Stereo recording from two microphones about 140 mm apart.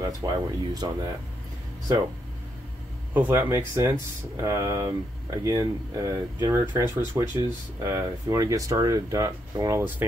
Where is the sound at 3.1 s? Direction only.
15° right (ahead or behind).